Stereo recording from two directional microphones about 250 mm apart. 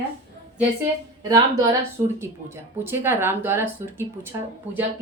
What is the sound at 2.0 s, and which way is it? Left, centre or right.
Speech, centre.